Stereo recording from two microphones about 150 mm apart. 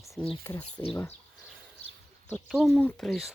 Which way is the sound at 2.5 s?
Centre (ahead or behind).